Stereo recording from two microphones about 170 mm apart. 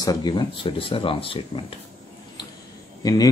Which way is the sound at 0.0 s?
25° left (ahead or behind).